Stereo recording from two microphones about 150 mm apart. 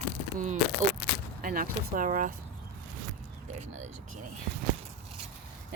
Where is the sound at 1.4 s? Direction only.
70° right (ahead or behind).